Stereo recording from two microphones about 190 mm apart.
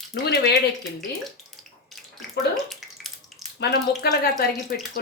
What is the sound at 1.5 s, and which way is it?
Water, centre (ahead or behind).